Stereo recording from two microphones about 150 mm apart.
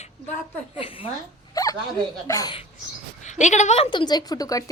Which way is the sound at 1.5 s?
25° left (ahead or behind).